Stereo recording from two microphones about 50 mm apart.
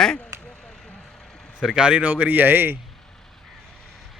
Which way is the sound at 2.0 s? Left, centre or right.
Right.